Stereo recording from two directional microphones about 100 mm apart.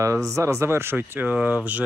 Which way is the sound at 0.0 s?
30° right (ahead or behind).